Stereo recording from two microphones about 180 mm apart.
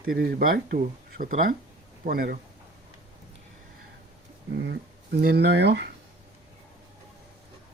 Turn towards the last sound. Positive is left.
turn(degrees=-65)  # may be behind; listen again after turning